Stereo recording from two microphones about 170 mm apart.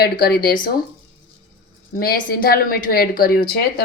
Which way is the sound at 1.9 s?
60° left (ahead or behind).